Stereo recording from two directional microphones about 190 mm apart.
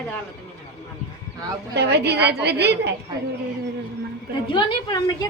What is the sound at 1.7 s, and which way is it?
A woman's voice, 60° right (ahead or behind).